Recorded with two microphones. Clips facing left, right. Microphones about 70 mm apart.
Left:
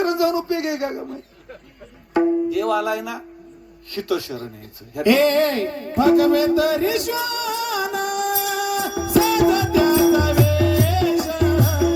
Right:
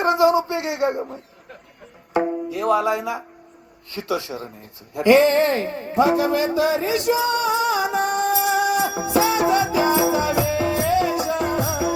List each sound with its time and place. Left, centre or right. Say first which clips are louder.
0.0 s speech: right 3 dB; right
2.1 s tabla: left 4 dB; centre
2.5 s speech: right 1 dB; right
4.9 s a sound: right 1 dB; right